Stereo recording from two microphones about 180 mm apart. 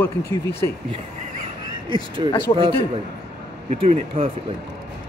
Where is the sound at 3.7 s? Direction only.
35° right (ahead or behind).